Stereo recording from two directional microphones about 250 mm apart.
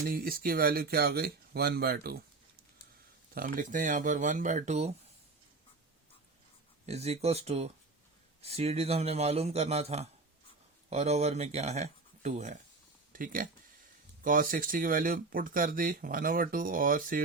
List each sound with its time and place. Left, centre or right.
0.1 s speech: right
3.3 s speech: right
6.8 s a man's voice: right